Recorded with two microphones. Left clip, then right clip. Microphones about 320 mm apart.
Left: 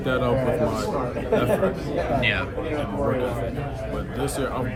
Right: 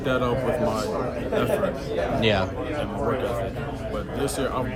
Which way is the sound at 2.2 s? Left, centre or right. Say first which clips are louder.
Right 1 dB; centre.